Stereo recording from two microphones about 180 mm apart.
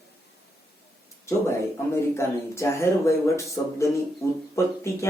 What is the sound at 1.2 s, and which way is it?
Speech, 15° left (ahead or behind).